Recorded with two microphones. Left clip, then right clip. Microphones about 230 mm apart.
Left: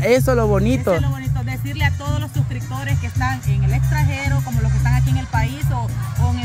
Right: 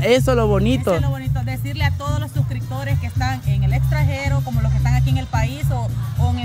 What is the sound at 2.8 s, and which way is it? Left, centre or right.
Speech, centre.